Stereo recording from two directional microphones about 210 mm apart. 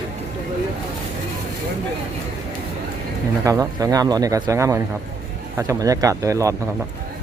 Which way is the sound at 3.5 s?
15° right (ahead or behind).